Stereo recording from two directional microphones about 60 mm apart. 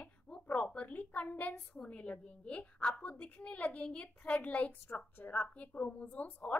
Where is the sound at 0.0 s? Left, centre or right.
Left.